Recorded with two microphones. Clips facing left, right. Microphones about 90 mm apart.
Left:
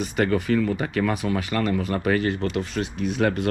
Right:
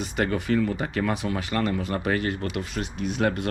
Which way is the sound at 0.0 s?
30° right (ahead or behind).